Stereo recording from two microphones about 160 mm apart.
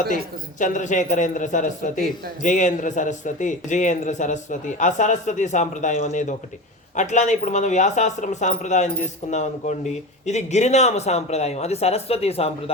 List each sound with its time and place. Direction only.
0.6 s a man's voice: 50° left (ahead or behind)